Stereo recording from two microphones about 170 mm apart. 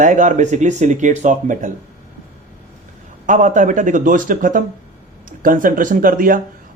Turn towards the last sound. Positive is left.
turn(degrees=-55)  # may be behind; listen again after turning